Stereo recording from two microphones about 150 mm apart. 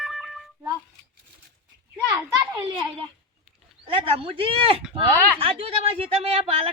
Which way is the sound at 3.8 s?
40° right (ahead or behind).